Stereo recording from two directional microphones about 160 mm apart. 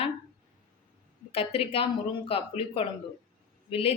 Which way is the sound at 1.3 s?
35° left (ahead or behind).